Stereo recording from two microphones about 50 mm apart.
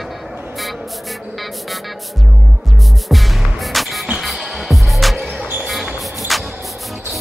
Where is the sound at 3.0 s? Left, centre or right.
Centre.